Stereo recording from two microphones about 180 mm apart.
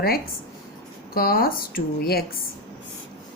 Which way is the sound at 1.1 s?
55° left (ahead or behind).